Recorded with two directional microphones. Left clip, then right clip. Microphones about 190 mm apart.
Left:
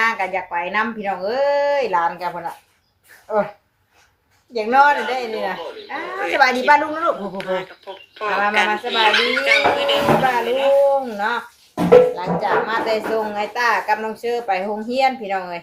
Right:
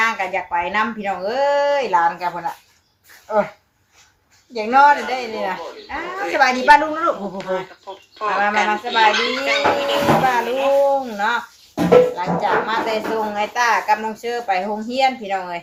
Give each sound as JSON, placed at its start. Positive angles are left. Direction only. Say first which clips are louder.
{"t": 0.0, "sound": "a woman's voice", "louder": "even", "side_deg": 10}
{"t": 4.5, "sound": "a woman's voice", "louder": "right 1 dB", "side_deg": 20}